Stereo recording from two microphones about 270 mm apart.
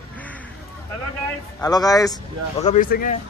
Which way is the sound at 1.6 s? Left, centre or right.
Centre.